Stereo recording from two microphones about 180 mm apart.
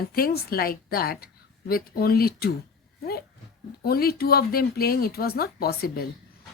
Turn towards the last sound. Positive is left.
turn(degrees=55)  # may be behind; listen again after turning